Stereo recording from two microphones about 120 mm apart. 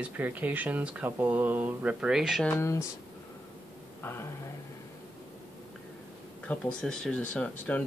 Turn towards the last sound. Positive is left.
turn(degrees=10)  # may be behind; listen again after turning